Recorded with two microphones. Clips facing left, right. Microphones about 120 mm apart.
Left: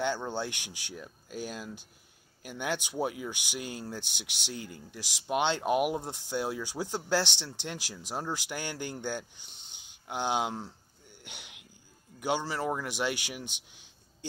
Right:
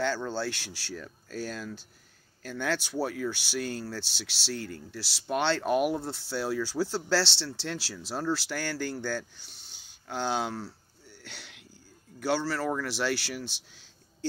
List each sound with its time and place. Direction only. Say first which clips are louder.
0.0 s speech: right 2 dB; 20° left (ahead or behind)